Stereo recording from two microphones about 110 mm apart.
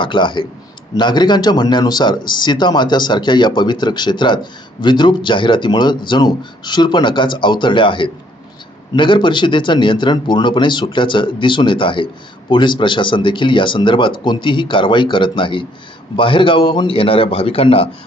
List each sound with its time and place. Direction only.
0.0 s a man's voice: 45° left (ahead or behind)